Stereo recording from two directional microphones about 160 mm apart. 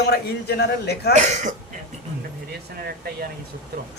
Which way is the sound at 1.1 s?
50° right (ahead or behind).